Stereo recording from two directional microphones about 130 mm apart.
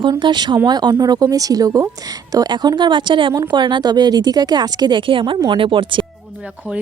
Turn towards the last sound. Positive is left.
turn(degrees=-40)  # may be behind; listen again after turning